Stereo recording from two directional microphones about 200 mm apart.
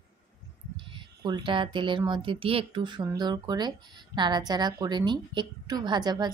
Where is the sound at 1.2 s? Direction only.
20° right (ahead or behind).